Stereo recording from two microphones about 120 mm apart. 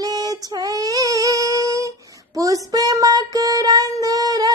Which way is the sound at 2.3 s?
30° right (ahead or behind).